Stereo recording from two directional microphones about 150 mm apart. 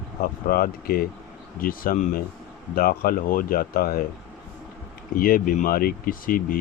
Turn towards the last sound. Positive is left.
turn(degrees=70)  # may be behind; listen again after turning